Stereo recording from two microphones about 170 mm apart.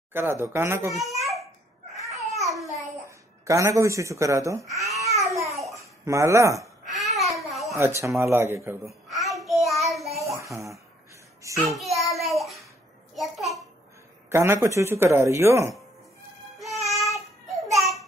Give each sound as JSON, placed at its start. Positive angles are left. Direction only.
{"t": 0.1, "sound": "speech", "side_deg": -15}
{"t": 1.1, "sound": "babbling", "side_deg": -20}
{"t": 2.5, "sound": "babbling", "side_deg": 0}
{"t": 3.1, "sound": "speech", "side_deg": -15}
{"t": 6.9, "sound": "babbling", "side_deg": 0}
{"t": 7.7, "sound": "speech", "side_deg": -15}
{"t": 9.1, "sound": "child singing", "side_deg": 0}
{"t": 10.2, "sound": "babbling", "side_deg": -20}
{"t": 11.4, "sound": "speech", "side_deg": -15}
{"t": 11.7, "sound": "child singing", "side_deg": 0}
{"t": 13.1, "sound": "a sound", "side_deg": 0}
{"t": 14.3, "sound": "speech", "side_deg": -15}
{"t": 16.8, "sound": "child singing", "side_deg": 0}
{"t": 17.7, "sound": "a sound", "side_deg": 0}